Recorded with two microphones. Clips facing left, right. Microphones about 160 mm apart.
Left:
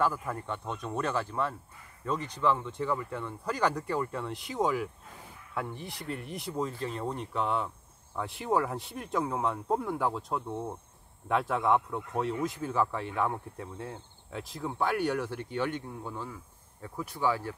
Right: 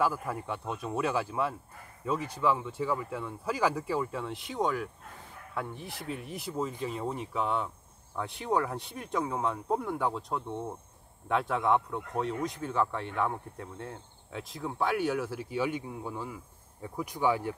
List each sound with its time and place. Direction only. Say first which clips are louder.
0.0 s speech: even; 5° right (ahead or behind)